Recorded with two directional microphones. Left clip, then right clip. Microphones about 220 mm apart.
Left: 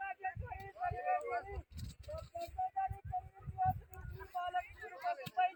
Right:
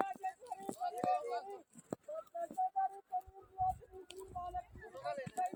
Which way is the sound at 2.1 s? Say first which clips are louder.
Right 1 dB; 10° left (ahead or behind).